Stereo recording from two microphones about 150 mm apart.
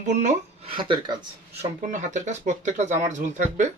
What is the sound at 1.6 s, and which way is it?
Speech, 55° right (ahead or behind).